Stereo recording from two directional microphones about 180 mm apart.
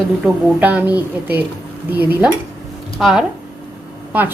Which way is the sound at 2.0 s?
10° right (ahead or behind).